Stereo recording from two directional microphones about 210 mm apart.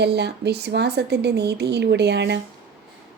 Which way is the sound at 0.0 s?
50° right (ahead or behind).